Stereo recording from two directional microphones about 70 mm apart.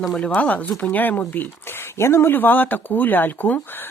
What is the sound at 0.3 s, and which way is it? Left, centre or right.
Speech, centre.